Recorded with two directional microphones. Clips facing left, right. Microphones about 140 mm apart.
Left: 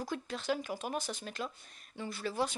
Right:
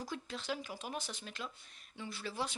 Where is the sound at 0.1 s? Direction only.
50° left (ahead or behind).